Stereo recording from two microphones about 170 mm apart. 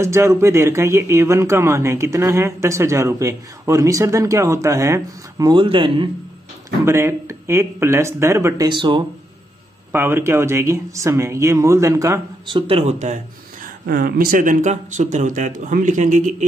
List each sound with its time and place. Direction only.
0.0 s speech: 15° right (ahead or behind)
6.8 s speech: 15° right (ahead or behind)
9.9 s speech: 15° right (ahead or behind); by 16.4 s 45° right (ahead or behind)